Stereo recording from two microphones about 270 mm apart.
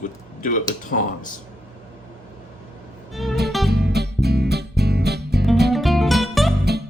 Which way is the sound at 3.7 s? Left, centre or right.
Right.